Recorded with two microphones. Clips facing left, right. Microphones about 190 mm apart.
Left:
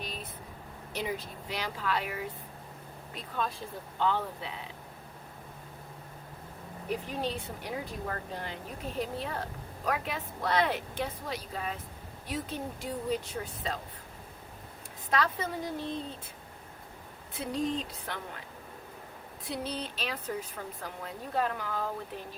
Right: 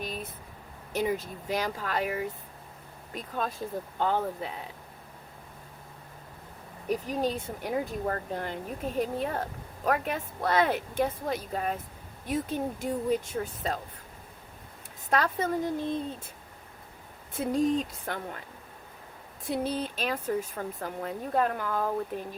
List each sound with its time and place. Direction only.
0.0 s a sound: 45° right (ahead or behind)
0.9 s a woman's voice: 45° right (ahead or behind)
6.8 s a woman's voice: 40° right (ahead or behind)
15.1 s a woman's voice: 45° right (ahead or behind)
17.3 s a woman's voice: 50° right (ahead or behind)
19.5 s a woman's voice: 50° right (ahead or behind)